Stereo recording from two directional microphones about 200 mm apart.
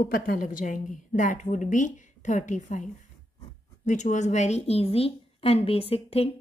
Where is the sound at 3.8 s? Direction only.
35° left (ahead or behind).